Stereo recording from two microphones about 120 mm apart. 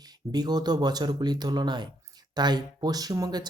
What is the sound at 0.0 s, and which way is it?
Speech, 35° right (ahead or behind).